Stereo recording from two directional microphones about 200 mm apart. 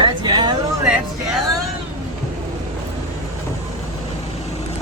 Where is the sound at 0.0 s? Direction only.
25° right (ahead or behind).